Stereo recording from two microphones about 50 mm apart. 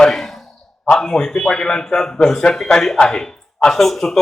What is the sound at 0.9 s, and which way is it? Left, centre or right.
Speech, centre.